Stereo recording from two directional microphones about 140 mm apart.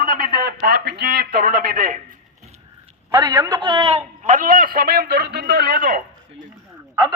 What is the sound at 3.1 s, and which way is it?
A man's voice, 30° right (ahead or behind).